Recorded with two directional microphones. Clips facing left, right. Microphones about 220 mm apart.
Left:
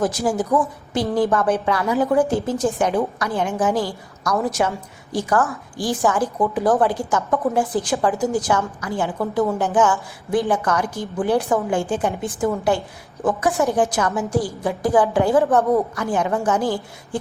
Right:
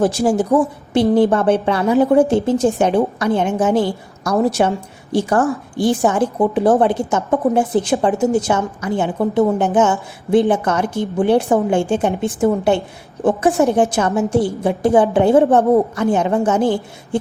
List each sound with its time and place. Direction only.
0.0 s a woman's voice: 30° right (ahead or behind)